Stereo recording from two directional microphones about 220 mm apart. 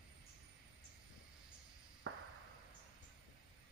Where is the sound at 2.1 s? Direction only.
65° right (ahead or behind).